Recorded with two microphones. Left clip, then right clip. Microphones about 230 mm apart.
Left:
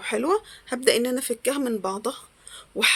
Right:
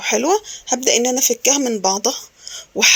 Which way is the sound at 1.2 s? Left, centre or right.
Centre.